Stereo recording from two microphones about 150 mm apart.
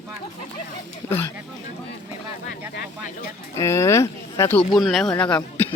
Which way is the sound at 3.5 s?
20° left (ahead or behind).